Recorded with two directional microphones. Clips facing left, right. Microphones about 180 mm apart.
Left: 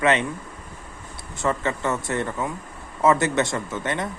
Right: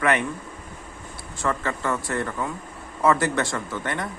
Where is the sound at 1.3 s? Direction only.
20° left (ahead or behind).